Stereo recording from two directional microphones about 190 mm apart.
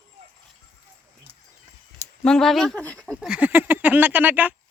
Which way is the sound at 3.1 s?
5° right (ahead or behind).